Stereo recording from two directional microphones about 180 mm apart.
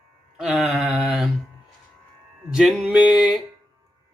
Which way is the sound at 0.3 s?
5° right (ahead or behind).